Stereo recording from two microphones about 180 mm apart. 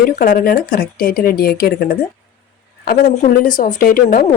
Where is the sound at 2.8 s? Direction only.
50° left (ahead or behind).